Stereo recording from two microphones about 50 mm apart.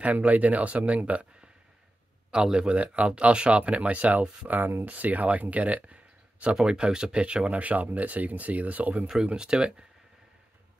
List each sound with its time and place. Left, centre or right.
0.0 s speech: right
2.3 s speech: centre
6.5 s speech: centre
9.2 s speech: centre